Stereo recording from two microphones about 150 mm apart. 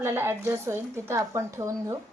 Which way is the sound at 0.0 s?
15° right (ahead or behind).